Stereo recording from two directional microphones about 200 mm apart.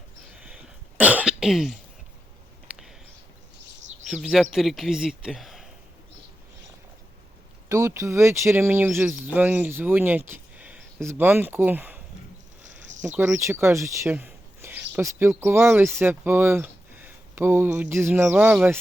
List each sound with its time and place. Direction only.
0.3 s cough: 5° right (ahead or behind)
4.1 s speech: centre (ahead or behind)
7.7 s speech: 15° right (ahead or behind)
12.9 s cricket: 35° right (ahead or behind)
13.1 s speech: 10° right (ahead or behind)